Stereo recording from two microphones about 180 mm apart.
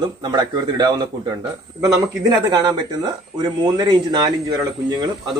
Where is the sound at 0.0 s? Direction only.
25° right (ahead or behind).